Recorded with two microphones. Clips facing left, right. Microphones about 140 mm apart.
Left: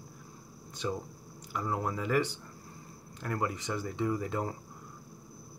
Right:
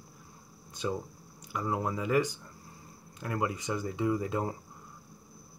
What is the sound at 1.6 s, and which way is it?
Speech, 15° right (ahead or behind).